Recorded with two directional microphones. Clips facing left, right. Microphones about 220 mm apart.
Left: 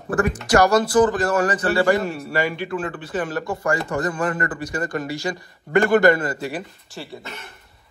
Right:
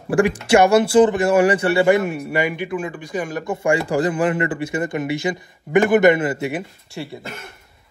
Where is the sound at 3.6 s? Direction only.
30° right (ahead or behind).